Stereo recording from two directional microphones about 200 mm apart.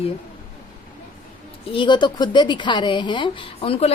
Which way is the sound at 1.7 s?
25° left (ahead or behind).